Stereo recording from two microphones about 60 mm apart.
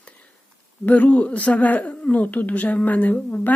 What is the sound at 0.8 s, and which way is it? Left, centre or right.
A woman's voice, left.